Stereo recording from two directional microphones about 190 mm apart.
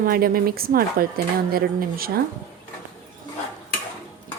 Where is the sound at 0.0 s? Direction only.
50° right (ahead or behind).